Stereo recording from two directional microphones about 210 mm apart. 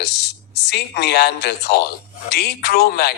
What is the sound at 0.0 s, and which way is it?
A man's voice, 50° left (ahead or behind).